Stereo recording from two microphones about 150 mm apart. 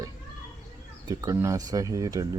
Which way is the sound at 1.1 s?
20° right (ahead or behind).